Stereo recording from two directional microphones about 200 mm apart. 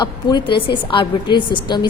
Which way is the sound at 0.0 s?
20° left (ahead or behind).